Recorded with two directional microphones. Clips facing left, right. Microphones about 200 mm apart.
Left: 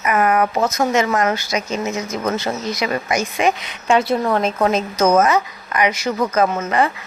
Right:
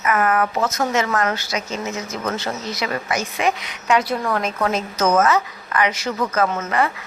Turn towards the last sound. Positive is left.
turn(degrees=15)  # may be behind; listen again after turning